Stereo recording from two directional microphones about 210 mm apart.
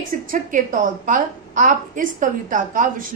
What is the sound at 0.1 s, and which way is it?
A woman's voice, 40° right (ahead or behind).